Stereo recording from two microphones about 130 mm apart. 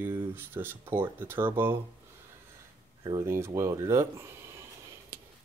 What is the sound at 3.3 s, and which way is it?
Speech, 20° right (ahead or behind).